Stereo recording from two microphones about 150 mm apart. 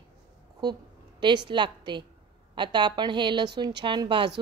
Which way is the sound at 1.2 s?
30° right (ahead or behind).